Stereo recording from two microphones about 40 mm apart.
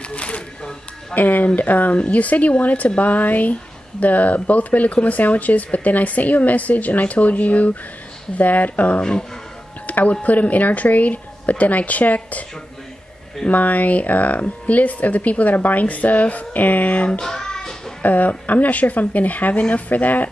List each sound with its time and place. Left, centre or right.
0.1 s speech: left
1.1 s speech: left
9.8 s a sound: left
10.2 s speech: left
13.5 s speech: left
17.2 s child singing: centre
18.0 s speech: left